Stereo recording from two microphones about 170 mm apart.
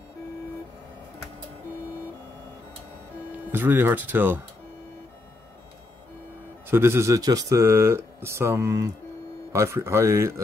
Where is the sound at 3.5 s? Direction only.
10° right (ahead or behind).